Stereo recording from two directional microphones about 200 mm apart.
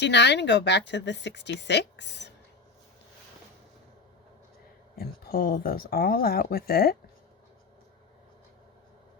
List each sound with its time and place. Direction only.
0.0 s speech: 60° left (ahead or behind)
4.9 s speech: 50° left (ahead or behind)